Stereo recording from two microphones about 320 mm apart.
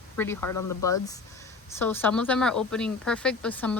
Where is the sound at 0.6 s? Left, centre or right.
Left.